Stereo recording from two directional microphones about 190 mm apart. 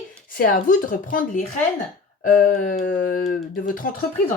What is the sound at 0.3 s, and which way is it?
Speech, 45° left (ahead or behind).